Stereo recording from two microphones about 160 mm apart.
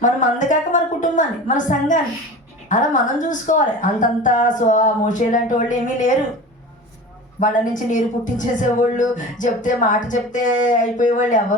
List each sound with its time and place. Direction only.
0.0 s a woman's voice: 50° left (ahead or behind)
7.3 s a woman's voice: 55° left (ahead or behind)